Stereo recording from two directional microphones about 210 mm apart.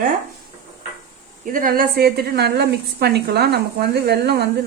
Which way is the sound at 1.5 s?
40° right (ahead or behind).